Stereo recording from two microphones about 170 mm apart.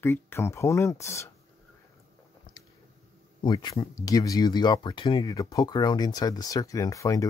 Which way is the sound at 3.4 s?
25° left (ahead or behind).